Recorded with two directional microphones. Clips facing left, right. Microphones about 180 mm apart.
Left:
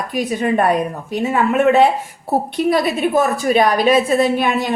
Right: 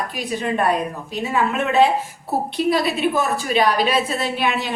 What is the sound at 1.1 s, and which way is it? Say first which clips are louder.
A woman's voice: left 5 dB; 50° left (ahead or behind).